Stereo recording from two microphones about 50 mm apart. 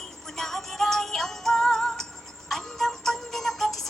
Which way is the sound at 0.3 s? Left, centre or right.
Centre.